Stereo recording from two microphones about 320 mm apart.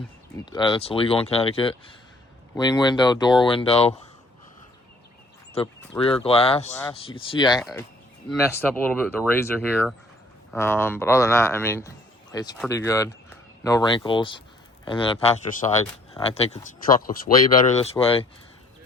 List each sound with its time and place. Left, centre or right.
0.5 s speech: centre
5.5 s speech: centre